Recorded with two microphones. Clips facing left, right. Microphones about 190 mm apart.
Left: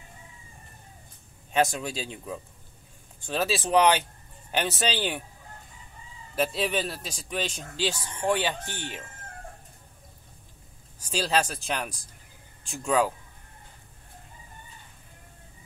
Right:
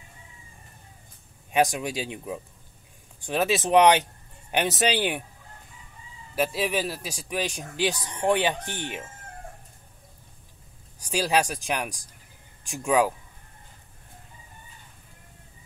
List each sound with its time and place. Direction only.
1.5 s a man's voice: 15° right (ahead or behind)
6.3 s a man's voice: 5° right (ahead or behind)
11.0 s a man's voice: 10° right (ahead or behind)